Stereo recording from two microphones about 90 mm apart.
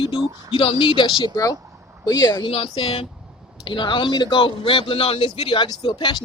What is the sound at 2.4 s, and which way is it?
Speech, 90° left.